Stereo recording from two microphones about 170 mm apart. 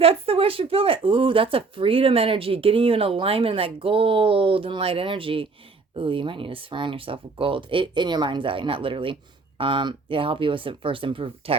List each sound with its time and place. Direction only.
0.0 s speech: 35° right (ahead or behind)